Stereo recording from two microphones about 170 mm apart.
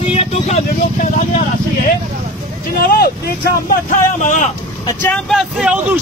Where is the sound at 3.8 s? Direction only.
50° left (ahead or behind).